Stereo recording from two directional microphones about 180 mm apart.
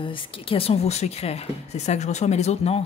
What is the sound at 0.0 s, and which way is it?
Speech, 30° left (ahead or behind).